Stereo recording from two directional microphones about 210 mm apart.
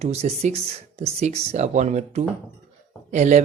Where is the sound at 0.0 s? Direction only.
30° right (ahead or behind).